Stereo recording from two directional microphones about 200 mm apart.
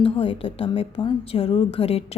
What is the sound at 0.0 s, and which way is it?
A woman's voice, 25° left (ahead or behind).